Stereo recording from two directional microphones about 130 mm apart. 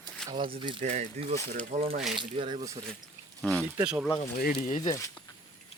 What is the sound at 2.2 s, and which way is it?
Speech, 35° right (ahead or behind).